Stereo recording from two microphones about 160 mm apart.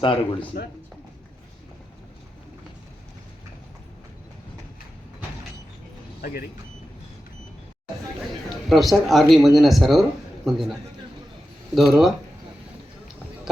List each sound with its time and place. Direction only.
0.0 s speech: 35° left (ahead or behind)
6.2 s speech: 70° left (ahead or behind)
8.7 s speech: centre (ahead or behind)